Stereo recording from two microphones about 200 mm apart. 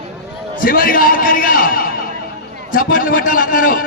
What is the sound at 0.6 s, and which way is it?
A man's voice, 45° left (ahead or behind).